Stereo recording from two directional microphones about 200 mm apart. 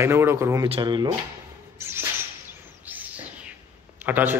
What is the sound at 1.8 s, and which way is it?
Speech, 10° right (ahead or behind).